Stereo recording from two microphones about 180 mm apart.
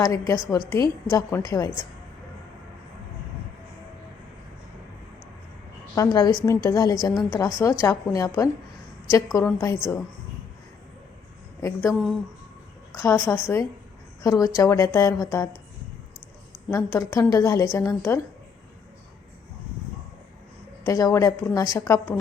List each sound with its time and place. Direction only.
0.0 s a woman's voice: 20° left (ahead or behind)
5.9 s a woman's voice: 20° left (ahead or behind)
11.6 s a woman's voice: 15° left (ahead or behind)
16.7 s a woman's voice: 15° left (ahead or behind)
20.8 s a woman's voice: 15° left (ahead or behind)